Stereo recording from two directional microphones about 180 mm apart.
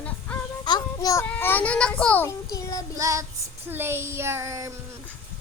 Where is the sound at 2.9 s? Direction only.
20° right (ahead or behind).